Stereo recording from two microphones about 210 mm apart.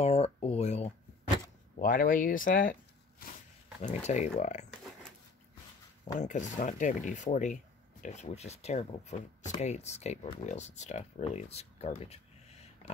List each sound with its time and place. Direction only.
0.0 s a sound: 30° left (ahead or behind)
1.8 s speech: 40° left (ahead or behind)
6.1 s speech: 35° left (ahead or behind)